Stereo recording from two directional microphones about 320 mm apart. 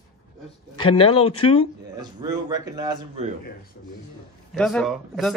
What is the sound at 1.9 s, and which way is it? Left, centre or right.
A man's voice, centre.